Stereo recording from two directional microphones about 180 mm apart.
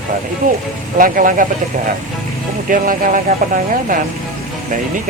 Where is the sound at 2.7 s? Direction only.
45° right (ahead or behind).